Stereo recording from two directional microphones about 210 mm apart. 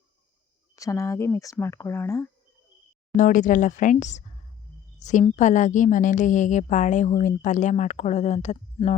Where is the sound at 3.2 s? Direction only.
40° left (ahead or behind).